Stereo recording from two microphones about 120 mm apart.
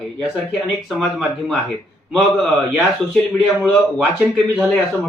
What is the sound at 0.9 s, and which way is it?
A man's voice, 5° right (ahead or behind).